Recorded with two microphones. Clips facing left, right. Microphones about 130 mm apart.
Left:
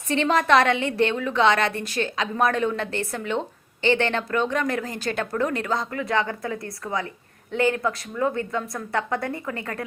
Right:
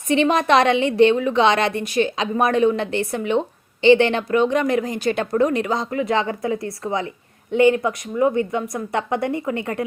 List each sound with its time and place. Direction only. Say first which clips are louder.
0.1 s a woman's voice: right 3 dB; 20° right (ahead or behind)